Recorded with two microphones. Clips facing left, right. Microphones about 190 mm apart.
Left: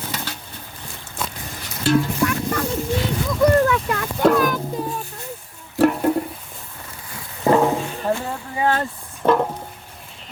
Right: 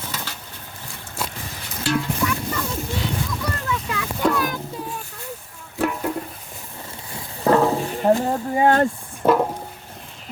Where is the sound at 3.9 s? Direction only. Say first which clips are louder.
Left 5 dB; 50° left (ahead or behind).